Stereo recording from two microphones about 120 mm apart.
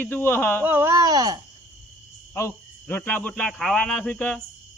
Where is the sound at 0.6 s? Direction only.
20° right (ahead or behind).